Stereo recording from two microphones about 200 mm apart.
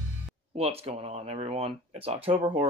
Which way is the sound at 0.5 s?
30° right (ahead or behind).